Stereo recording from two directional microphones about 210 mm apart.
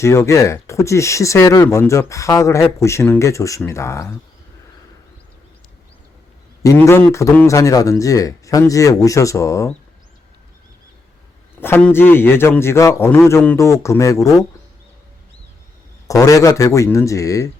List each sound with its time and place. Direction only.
0.0 s speech: 15° left (ahead or behind)
6.6 s speech: 15° left (ahead or behind)
11.6 s speech: 10° left (ahead or behind)
16.0 s speech: 15° left (ahead or behind)